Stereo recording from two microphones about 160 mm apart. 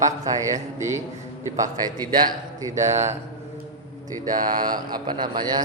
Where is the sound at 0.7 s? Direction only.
20° right (ahead or behind).